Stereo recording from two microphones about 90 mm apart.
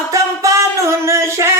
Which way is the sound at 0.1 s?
35° right (ahead or behind).